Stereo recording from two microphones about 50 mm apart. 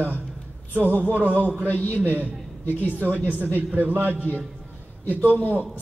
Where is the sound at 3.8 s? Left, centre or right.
Right.